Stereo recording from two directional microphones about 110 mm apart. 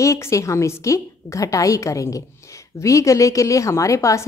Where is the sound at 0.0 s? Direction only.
30° left (ahead or behind).